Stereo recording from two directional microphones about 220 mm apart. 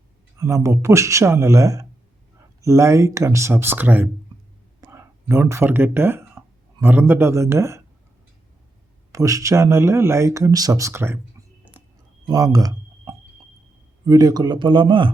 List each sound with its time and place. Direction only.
0.3 s speech: 15° right (ahead or behind)
9.1 s speech: 15° right (ahead or behind)